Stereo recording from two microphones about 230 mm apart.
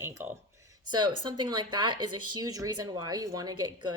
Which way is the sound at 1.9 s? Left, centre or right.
Right.